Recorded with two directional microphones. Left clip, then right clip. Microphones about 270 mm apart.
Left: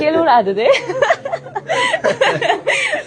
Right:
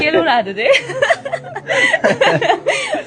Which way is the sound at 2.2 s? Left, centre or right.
Centre.